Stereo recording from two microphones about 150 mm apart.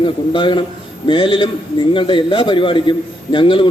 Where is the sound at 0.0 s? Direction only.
35° left (ahead or behind).